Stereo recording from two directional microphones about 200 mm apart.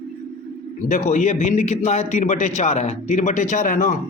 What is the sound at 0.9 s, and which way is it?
A man's voice, 40° left (ahead or behind).